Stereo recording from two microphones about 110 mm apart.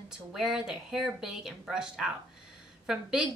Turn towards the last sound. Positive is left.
turn(degrees=-5)  # may be behind; listen again after turning